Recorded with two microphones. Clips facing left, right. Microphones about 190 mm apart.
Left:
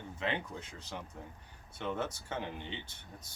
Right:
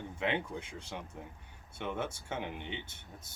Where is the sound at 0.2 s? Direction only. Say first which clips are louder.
Right 3 dB; 10° right (ahead or behind).